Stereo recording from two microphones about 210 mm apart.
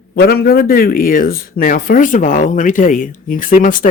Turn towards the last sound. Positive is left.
turn(degrees=40)  # may be behind; listen again after turning